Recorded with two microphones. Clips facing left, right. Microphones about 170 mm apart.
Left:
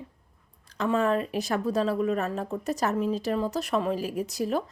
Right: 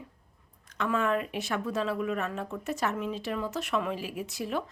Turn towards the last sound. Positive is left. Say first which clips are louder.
# left 5 dB
turn(degrees=40)  # may be behind; listen again after turning